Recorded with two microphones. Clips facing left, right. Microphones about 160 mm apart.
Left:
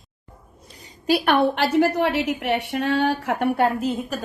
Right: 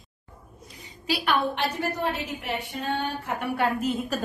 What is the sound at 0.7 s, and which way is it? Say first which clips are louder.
A woman's voice: left 9 dB; 40° left (ahead or behind).